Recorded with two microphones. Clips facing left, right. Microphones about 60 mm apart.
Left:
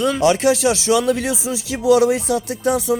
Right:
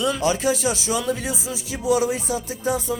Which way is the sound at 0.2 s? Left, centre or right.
Left.